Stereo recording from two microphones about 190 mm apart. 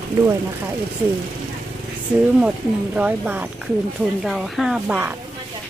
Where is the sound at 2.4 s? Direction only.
5° right (ahead or behind).